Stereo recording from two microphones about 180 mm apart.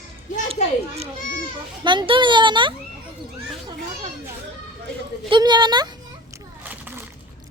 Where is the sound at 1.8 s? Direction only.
25° right (ahead or behind).